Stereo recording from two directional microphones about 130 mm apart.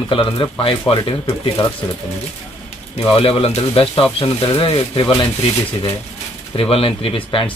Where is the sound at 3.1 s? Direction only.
45° left (ahead or behind).